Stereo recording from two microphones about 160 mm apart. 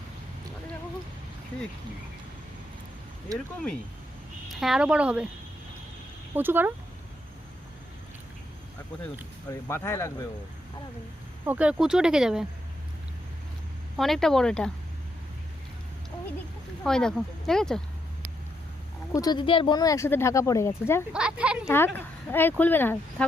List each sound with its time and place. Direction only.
3.3 s speech: 20° right (ahead or behind)
4.4 s speech: centre (ahead or behind)
6.3 s speech: 10° right (ahead or behind)
9.5 s speech: 15° left (ahead or behind)
11.4 s speech: 10° right (ahead or behind)
13.9 s speech: centre (ahead or behind)
16.8 s speech: 5° left (ahead or behind)
19.1 s speech: 25° left (ahead or behind)
21.1 s speech: 5° right (ahead or behind)
21.6 s speech: 15° left (ahead or behind)